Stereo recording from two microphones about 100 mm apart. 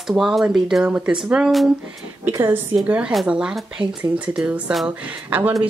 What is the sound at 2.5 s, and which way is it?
Speech, 20° right (ahead or behind).